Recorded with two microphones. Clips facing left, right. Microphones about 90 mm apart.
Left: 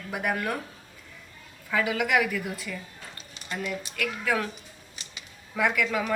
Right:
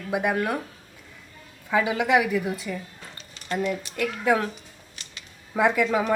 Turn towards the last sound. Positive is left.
turn(degrees=-30)  # may be behind; listen again after turning